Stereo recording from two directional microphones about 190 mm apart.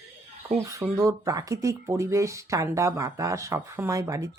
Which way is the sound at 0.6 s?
15° right (ahead or behind).